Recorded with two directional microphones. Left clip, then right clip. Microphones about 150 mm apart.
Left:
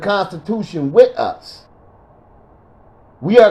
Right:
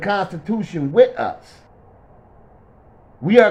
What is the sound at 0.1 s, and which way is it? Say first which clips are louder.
A man's voice: left 4 dB; 20° left (ahead or behind).